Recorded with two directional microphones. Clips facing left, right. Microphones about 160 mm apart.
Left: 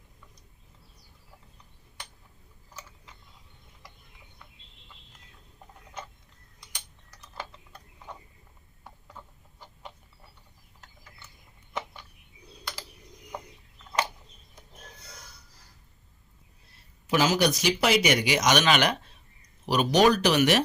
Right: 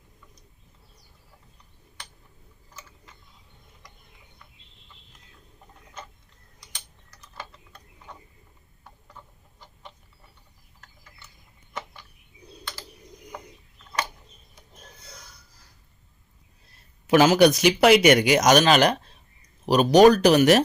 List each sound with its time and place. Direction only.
17.1 s speech: 60° right (ahead or behind); by 20.6 s 40° right (ahead or behind)